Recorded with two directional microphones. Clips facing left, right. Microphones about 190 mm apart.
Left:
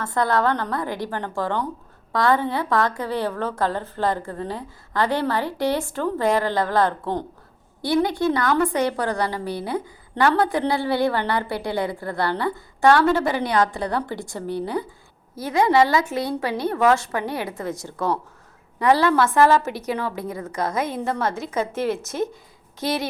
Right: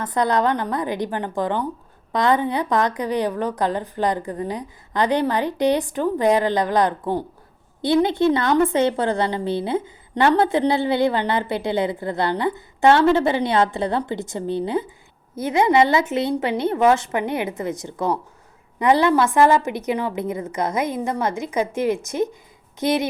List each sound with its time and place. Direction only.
0.0 s a woman's voice: 20° right (ahead or behind)
7.8 s a woman's voice: 20° right (ahead or behind)